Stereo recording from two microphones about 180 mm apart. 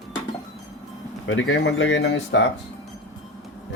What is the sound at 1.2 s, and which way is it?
Speech, 90° left.